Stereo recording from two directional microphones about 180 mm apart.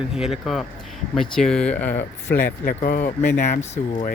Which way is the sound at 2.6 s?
55° left (ahead or behind).